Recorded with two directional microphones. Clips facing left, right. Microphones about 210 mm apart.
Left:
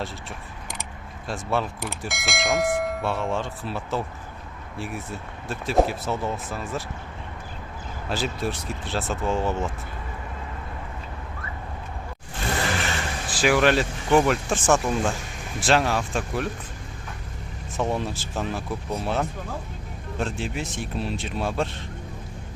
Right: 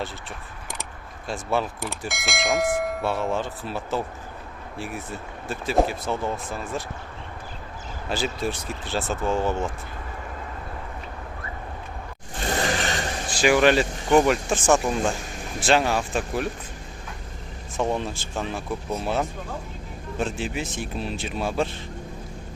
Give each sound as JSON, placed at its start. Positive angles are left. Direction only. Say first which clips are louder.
{"t": 1.3, "sound": "speech", "louder": "right 1 dB", "side_deg": 0}
{"t": 5.5, "sound": "speech", "louder": "even", "side_deg": 0}
{"t": 8.1, "sound": "speech", "louder": "right 1 dB", "side_deg": 0}
{"t": 13.2, "sound": "speech", "louder": "right 2 dB", "side_deg": 0}
{"t": 17.7, "sound": "speech", "louder": "right 1 dB", "side_deg": 0}